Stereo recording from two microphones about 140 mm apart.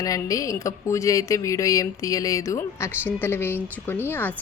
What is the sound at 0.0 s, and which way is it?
A woman's voice, 25° left (ahead or behind).